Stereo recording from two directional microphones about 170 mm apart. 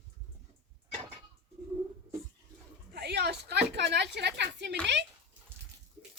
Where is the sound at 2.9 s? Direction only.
75° right (ahead or behind).